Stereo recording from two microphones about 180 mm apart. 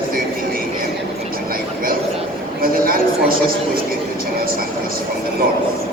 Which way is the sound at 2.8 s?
55° right (ahead or behind).